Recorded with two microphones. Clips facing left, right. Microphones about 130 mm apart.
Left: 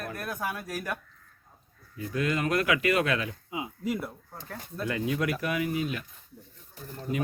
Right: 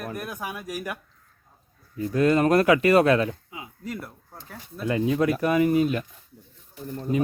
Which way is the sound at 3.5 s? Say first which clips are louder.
Left 5 dB; 20° left (ahead or behind).